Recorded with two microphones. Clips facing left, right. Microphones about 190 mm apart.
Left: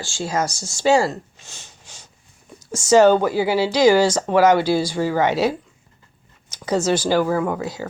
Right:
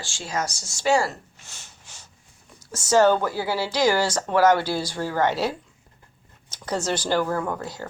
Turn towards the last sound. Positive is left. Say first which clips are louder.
# left 5 dB
turn(degrees=10)  # may be behind; listen again after turning